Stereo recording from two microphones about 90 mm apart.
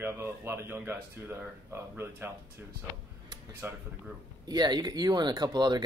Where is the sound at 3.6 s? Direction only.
25° right (ahead or behind).